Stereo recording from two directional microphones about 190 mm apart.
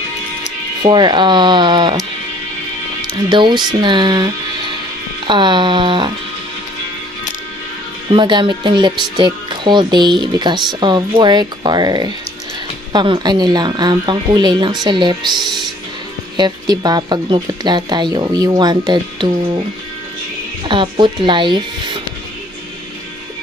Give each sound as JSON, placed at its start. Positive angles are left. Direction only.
{"t": 0.8, "sound": "speech", "side_deg": -25}
{"t": 3.3, "sound": "speech", "side_deg": -25}
{"t": 8.1, "sound": "speech", "side_deg": -25}
{"t": 16.3, "sound": "speech", "side_deg": -20}
{"t": 20.6, "sound": "speech", "side_deg": -25}